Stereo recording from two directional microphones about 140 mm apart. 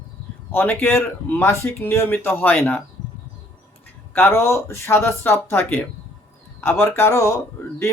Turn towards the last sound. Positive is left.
turn(degrees=20)  # may be behind; listen again after turning